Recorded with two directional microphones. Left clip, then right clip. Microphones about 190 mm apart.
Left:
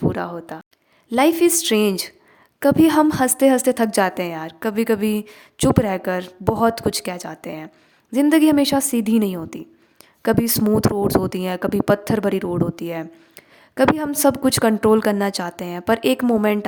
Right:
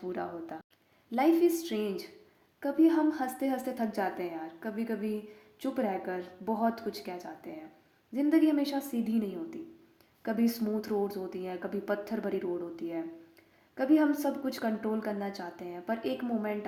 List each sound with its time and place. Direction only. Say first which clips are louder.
0.1 s speech: left 10 dB; 40° left (ahead or behind)